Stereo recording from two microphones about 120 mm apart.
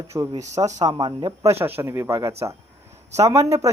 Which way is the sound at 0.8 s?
40° right (ahead or behind).